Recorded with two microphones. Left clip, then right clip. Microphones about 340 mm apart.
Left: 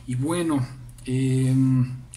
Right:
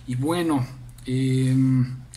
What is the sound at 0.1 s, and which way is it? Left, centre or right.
Speech, centre.